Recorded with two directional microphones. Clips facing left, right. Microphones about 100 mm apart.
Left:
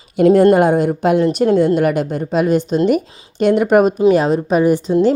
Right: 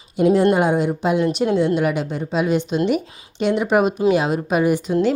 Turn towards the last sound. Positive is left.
turn(degrees=35)  # may be behind; listen again after turning